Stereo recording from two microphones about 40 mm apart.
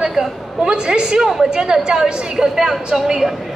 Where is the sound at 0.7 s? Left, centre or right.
Right.